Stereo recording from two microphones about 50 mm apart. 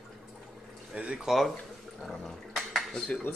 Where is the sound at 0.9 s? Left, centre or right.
Centre.